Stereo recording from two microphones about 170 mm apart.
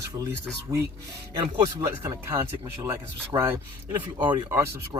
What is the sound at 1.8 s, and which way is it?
Speech, 15° right (ahead or behind).